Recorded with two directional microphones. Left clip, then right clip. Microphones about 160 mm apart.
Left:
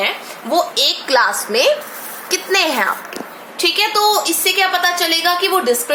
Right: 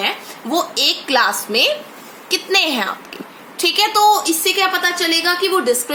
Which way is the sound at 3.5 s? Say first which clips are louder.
Even; 25° right (ahead or behind).